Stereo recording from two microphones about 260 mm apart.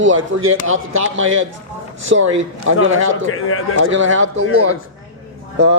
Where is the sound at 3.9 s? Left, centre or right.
Right.